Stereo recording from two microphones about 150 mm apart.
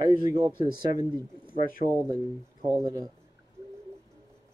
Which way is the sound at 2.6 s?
20° right (ahead or behind).